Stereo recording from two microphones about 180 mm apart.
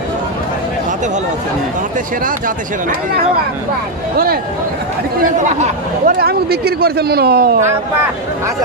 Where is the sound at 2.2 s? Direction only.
50° right (ahead or behind).